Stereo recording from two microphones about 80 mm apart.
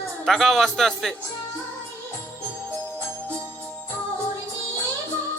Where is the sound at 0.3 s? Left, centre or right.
Centre.